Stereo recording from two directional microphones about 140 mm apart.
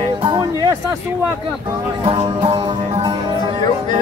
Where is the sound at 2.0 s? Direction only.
45° right (ahead or behind).